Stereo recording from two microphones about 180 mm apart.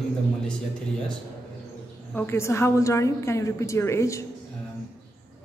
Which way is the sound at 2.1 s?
10° left (ahead or behind).